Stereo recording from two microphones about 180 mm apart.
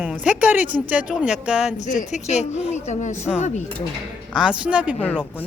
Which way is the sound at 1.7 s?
40° left (ahead or behind).